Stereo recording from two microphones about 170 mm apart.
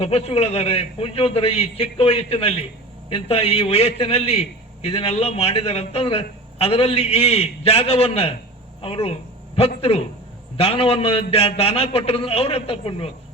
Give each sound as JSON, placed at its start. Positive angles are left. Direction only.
{"t": 0.0, "sound": "a man's voice", "side_deg": 35}